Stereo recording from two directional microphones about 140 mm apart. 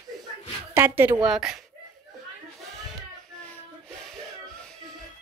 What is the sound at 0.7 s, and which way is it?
Speech, 15° right (ahead or behind).